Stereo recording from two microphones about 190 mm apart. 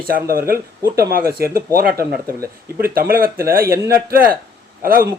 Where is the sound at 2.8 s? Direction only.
50° right (ahead or behind).